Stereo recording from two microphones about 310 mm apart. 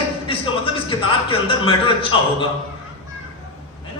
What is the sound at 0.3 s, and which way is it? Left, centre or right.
A man's voice, centre.